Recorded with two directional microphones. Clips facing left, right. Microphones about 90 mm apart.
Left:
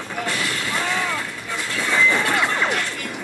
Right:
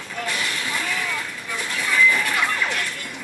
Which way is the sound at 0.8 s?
25° left (ahead or behind).